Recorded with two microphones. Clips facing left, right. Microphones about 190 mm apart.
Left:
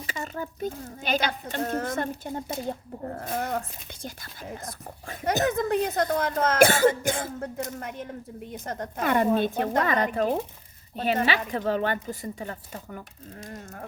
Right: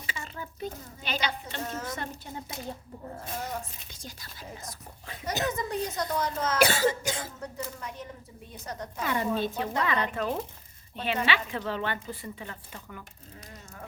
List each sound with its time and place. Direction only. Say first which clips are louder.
0.0 s a woman's voice: left 7 dB; 40° left (ahead or behind)